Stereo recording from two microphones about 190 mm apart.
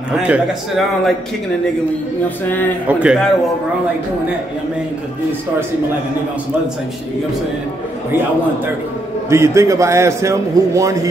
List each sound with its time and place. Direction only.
0.1 s a man's voice: 5° right (ahead or behind)
2.9 s a man's voice: 5° right (ahead or behind)
9.3 s a man's voice: 15° right (ahead or behind)